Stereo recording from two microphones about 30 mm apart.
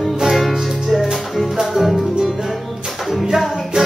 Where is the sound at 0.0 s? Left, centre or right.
Centre.